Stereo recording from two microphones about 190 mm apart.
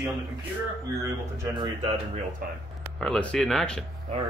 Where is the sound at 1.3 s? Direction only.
15° right (ahead or behind).